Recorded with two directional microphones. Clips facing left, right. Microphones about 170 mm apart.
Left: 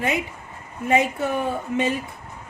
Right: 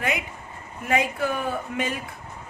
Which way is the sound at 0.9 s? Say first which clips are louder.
Left 3 dB; 25° left (ahead or behind).